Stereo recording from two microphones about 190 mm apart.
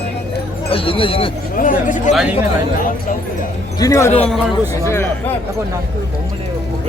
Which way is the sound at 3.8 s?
15° left (ahead or behind).